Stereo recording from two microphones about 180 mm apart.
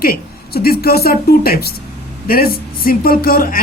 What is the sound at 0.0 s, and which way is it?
Speech, 55° left (ahead or behind).